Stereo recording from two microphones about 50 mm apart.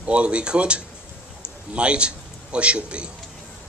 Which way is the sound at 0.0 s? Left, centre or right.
Right.